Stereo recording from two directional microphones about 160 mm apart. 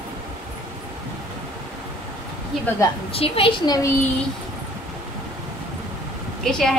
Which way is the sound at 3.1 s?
35° left (ahead or behind).